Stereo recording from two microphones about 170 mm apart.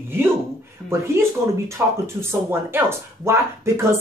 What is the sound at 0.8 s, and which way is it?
Speech, 15° right (ahead or behind).